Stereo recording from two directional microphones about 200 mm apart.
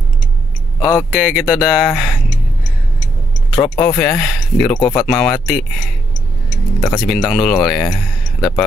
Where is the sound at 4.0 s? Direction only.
5° left (ahead or behind).